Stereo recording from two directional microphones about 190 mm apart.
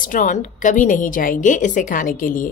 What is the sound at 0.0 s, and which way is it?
A woman's voice, 45° left (ahead or behind).